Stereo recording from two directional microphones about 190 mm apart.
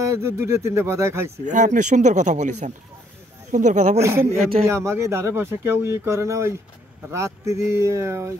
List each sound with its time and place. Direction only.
0.0 s speech: 15° right (ahead or behind)
1.4 s speech: 40° right (ahead or behind)
4.0 s speech: 15° right (ahead or behind)